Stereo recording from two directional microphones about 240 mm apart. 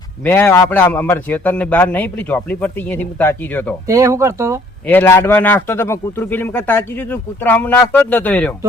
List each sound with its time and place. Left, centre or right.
0.3 s a man's voice: centre
3.8 s speech: centre
4.9 s a man's voice: centre